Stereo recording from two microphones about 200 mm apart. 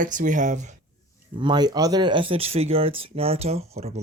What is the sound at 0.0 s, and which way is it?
Speech, 40° right (ahead or behind).